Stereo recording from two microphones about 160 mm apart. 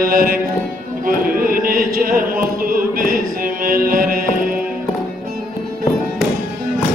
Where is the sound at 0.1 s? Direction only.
65° right (ahead or behind).